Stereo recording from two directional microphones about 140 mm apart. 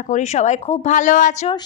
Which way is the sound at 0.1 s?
55° left (ahead or behind).